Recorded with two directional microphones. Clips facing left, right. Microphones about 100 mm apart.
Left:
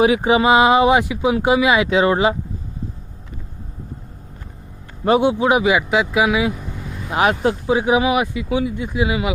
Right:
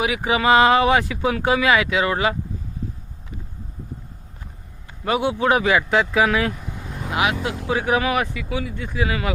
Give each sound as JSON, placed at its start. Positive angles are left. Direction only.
{"t": 0.0, "sound": "speech", "side_deg": 30}
{"t": 5.0, "sound": "speech", "side_deg": 25}
{"t": 7.1, "sound": "speech", "side_deg": 35}
{"t": 7.7, "sound": "speech", "side_deg": 20}